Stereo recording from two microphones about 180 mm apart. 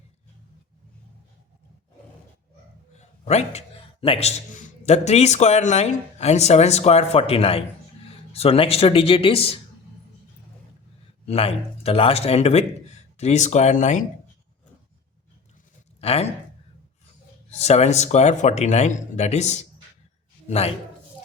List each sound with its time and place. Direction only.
3.2 s a man's voice: 35° left (ahead or behind)
11.3 s a man's voice: 35° left (ahead or behind)
16.0 s speech: 35° left (ahead or behind)
17.5 s a man's voice: 35° left (ahead or behind)